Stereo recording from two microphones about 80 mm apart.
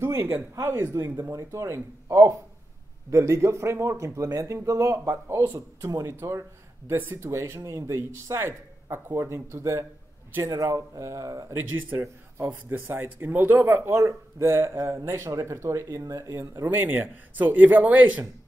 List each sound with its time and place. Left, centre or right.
0.0 s speech: right
11.5 s speech: right
16.6 s speech: right